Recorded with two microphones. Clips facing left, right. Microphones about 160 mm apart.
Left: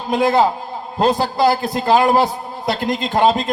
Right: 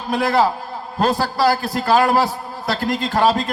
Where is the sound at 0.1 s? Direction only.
20° left (ahead or behind).